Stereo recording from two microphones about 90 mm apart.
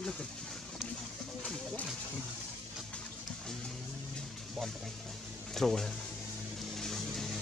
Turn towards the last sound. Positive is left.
turn(degrees=0)  # may be behind; listen again after turning